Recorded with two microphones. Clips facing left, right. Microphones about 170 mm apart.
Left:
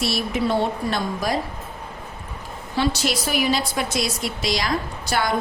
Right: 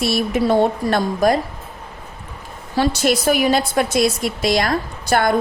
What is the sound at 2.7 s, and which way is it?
A woman's voice, 50° right (ahead or behind).